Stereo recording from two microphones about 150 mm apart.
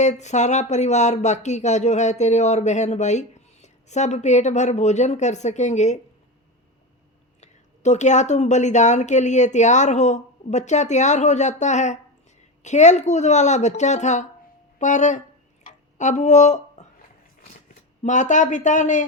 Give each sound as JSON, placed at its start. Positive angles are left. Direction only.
{"t": 0.0, "sound": "speech", "side_deg": 50}
{"t": 7.4, "sound": "speech", "side_deg": 50}
{"t": 15.6, "sound": "drip", "side_deg": 50}
{"t": 18.0, "sound": "speech", "side_deg": 55}